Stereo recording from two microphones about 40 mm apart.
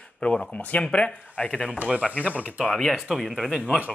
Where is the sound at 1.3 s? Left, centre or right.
Left.